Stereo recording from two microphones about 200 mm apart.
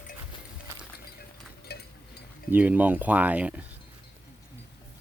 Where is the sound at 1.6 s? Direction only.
55° left (ahead or behind).